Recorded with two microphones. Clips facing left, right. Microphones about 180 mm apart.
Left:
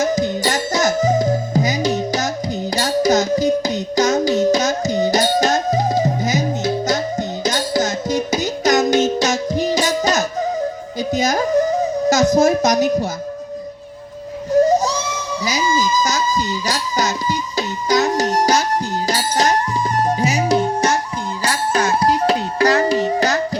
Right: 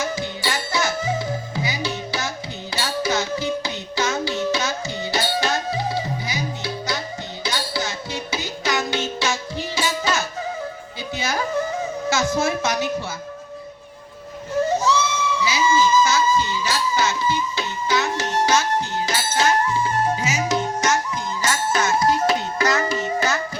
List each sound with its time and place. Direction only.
0.0 s music: 40° left (ahead or behind)
14.5 s music: 40° left (ahead or behind)